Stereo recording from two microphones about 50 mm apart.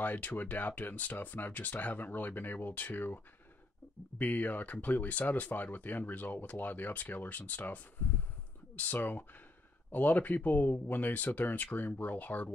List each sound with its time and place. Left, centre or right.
0.0 s speech: left
4.2 s speech: left